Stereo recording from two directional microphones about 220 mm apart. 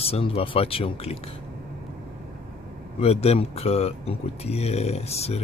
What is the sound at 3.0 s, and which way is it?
Speech, 30° left (ahead or behind).